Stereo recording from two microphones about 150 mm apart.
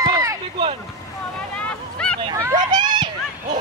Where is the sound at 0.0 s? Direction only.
25° right (ahead or behind).